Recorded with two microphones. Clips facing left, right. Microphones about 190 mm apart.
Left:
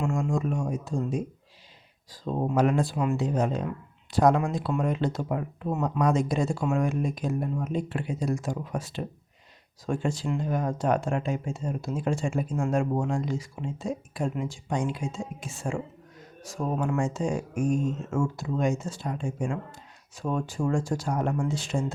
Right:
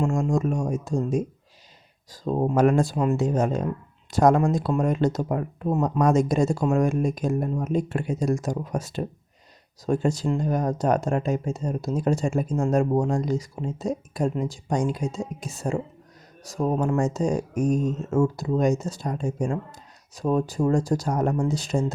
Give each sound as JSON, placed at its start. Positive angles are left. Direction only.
{"t": 0.0, "sound": "speech", "side_deg": -40}